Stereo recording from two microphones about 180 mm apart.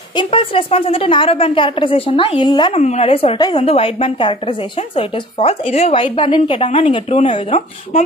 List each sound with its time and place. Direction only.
0.1 s a woman's voice: 30° left (ahead or behind)
2.8 s speech: 35° left (ahead or behind)